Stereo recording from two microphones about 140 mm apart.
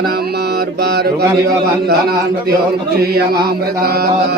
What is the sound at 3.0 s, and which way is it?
A man's voice, 90° right.